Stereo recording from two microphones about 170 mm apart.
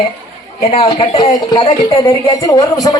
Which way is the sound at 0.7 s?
35° left (ahead or behind).